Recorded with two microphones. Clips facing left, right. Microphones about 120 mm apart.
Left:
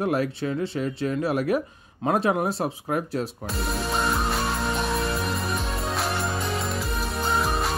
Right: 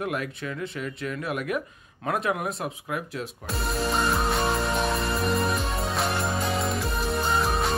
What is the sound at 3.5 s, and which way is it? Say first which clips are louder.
Music: right 2 dB; centre (ahead or behind).